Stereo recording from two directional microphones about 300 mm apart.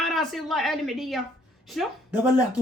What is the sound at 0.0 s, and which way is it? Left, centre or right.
A child's voice, centre.